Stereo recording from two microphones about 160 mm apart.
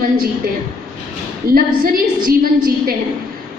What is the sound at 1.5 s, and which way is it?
A woman's voice, 65° right (ahead or behind).